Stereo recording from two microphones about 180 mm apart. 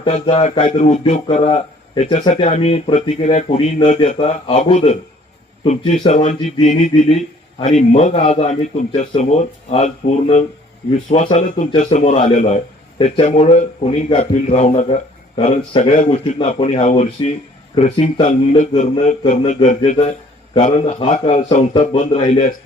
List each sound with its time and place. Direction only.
0.0 s a man's voice: 35° left (ahead or behind)
11.7 s a man's voice: 30° left (ahead or behind)